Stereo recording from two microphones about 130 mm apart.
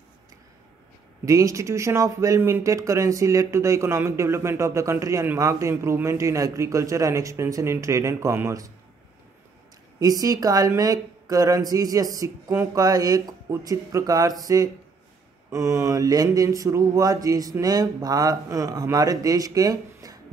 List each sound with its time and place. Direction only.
1.2 s speech: 25° right (ahead or behind)
9.9 s speech: 25° right (ahead or behind)